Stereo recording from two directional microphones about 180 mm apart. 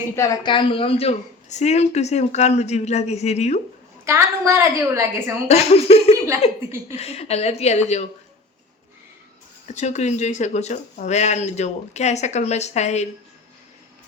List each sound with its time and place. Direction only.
0.2 s speech: 20° left (ahead or behind); by 3.6 s 35° left (ahead or behind)
4.0 s a woman's voice: 15° right (ahead or behind)
5.5 s speech: 35° left (ahead or behind)
9.6 s speech: 40° left (ahead or behind)